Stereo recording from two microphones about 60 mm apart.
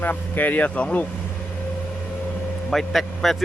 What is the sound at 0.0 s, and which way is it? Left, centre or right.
Speech, left.